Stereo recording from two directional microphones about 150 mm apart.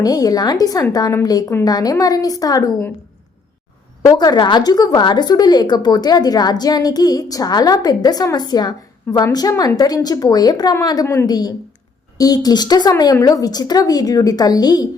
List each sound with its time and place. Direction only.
0.0 s speech: 25° left (ahead or behind)
4.0 s speech: 25° left (ahead or behind)